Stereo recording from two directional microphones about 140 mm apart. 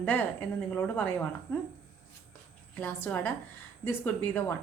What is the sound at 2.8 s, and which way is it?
Speech, 10° left (ahead or behind).